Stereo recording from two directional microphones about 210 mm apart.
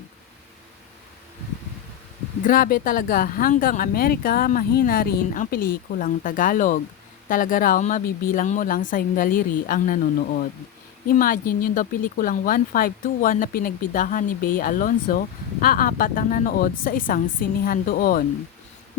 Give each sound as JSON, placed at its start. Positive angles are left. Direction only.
{"t": 2.5, "sound": "speech", "side_deg": 40}